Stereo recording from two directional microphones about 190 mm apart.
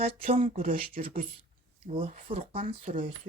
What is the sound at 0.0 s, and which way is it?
Speech, 30° right (ahead or behind).